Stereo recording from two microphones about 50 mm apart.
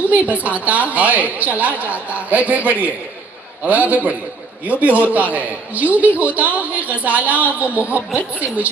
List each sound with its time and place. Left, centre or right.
0.0 s a woman's voice: right